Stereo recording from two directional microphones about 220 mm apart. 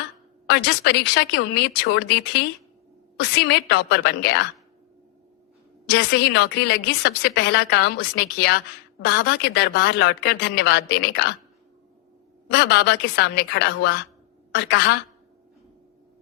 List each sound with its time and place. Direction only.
0.4 s a woman's voice: 50° left (ahead or behind)
5.9 s a woman's voice: 50° left (ahead or behind)
12.5 s a woman's voice: 50° left (ahead or behind)